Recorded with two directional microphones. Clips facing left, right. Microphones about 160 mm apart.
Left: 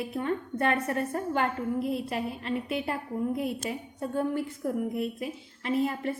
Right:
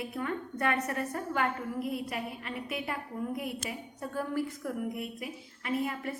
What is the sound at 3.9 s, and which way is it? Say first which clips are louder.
A woman's voice: left 4 dB; 25° left (ahead or behind).